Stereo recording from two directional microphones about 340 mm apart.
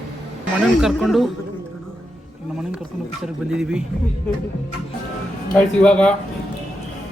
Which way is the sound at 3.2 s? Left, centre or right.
Centre.